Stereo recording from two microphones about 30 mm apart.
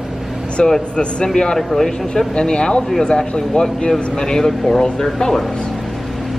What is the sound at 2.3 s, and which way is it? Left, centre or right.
Speech, left.